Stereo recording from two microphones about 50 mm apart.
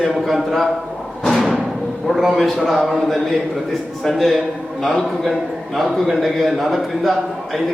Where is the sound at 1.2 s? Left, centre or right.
Centre.